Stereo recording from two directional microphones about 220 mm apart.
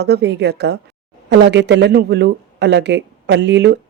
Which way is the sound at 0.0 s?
50° right (ahead or behind).